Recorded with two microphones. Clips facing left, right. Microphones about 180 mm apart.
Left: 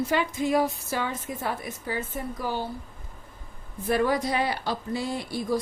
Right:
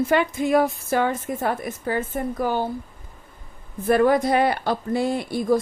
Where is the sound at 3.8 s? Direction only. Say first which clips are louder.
Right 7 dB; 55° right (ahead or behind).